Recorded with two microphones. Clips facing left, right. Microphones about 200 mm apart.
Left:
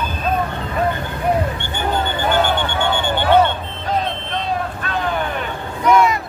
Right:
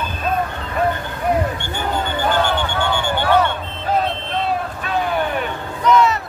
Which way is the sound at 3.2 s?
25° left (ahead or behind).